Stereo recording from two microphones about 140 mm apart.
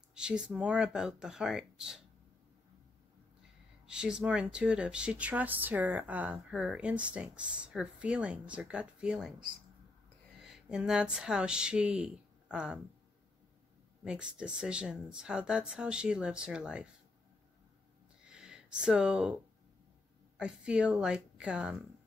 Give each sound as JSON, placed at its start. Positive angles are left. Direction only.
{"t": 0.1, "sound": "speech", "side_deg": -5}
{"t": 3.8, "sound": "speech", "side_deg": -5}
{"t": 10.4, "sound": "speech", "side_deg": -5}
{"t": 14.0, "sound": "speech", "side_deg": -5}
{"t": 18.2, "sound": "a sound", "side_deg": -5}
{"t": 20.3, "sound": "speech", "side_deg": -5}